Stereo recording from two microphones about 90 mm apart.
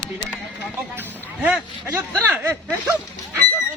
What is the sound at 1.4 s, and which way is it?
Speech, 15° right (ahead or behind).